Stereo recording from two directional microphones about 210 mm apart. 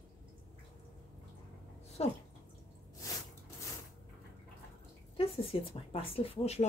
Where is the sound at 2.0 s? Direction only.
30° left (ahead or behind).